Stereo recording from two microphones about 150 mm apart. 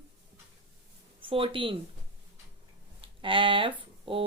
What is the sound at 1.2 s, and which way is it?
Speech, 35° right (ahead or behind).